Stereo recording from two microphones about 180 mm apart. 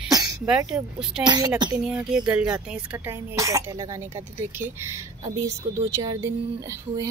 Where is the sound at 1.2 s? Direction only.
20° right (ahead or behind).